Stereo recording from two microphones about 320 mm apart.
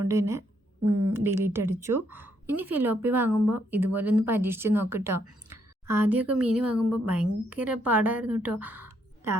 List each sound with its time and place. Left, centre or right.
0.0 s a woman's voice: centre
0.9 s speech: right
1.2 s a woman's voice: centre